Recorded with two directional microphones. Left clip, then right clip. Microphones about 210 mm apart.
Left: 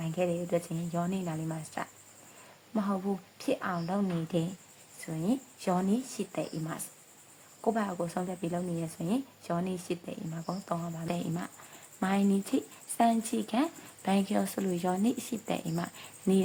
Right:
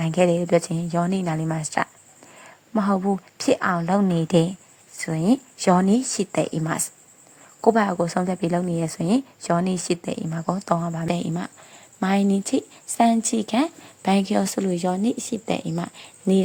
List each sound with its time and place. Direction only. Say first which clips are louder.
0.0 s speech: right 12 dB; 40° right (ahead or behind)